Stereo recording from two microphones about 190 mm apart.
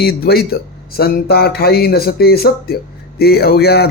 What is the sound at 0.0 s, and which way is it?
Speech, 55° left (ahead or behind).